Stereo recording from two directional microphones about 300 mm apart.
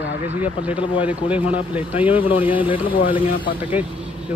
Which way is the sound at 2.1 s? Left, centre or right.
Centre.